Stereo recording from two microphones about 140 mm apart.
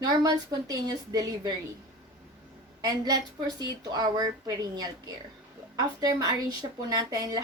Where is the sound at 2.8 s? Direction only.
30° right (ahead or behind).